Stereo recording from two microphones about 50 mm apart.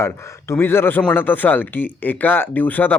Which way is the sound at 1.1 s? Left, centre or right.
Left.